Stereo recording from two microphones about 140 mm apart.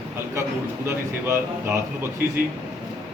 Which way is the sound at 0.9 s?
20° right (ahead or behind).